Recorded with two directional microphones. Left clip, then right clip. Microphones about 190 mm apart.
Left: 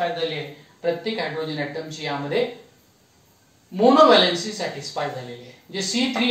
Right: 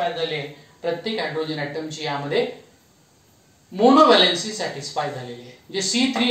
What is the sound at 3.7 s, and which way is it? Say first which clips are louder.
Speech: even; 20° right (ahead or behind).